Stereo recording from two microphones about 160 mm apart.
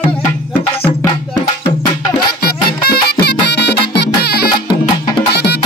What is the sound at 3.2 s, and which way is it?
Music, 90° left.